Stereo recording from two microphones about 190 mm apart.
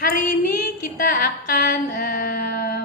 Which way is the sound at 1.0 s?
50° left (ahead or behind).